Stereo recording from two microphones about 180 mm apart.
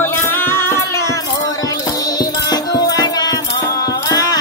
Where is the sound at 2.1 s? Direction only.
20° left (ahead or behind).